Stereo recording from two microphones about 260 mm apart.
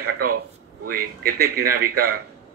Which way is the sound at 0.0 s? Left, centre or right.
Right.